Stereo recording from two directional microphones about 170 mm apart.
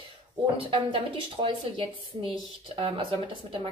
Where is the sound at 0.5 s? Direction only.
30° right (ahead or behind).